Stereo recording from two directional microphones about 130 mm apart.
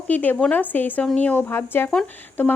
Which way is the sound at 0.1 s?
10° left (ahead or behind).